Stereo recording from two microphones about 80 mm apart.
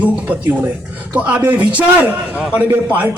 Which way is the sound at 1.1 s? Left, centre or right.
Centre.